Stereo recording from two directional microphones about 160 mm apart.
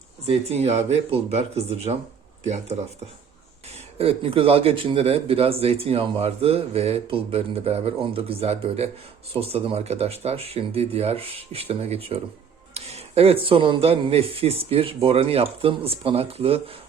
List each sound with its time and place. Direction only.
0.3 s speech: 40° right (ahead or behind)
3.9 s speech: 35° right (ahead or behind)